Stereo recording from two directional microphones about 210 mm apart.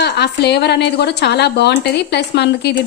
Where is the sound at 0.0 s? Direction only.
50° left (ahead or behind).